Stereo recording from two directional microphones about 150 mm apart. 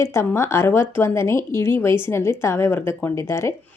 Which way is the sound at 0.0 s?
20° left (ahead or behind).